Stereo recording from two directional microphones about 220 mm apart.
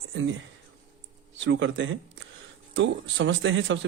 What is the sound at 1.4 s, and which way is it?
A man's voice, 55° right (ahead or behind).